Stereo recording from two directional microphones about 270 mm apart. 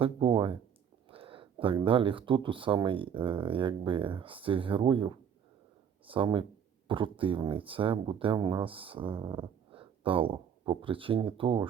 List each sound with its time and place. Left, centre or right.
0.0 s speech: centre